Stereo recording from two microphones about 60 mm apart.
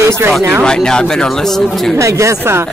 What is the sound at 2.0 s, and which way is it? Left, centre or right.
Speech, right.